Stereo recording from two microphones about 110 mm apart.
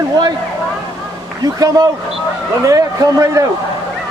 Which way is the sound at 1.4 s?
35° right (ahead or behind).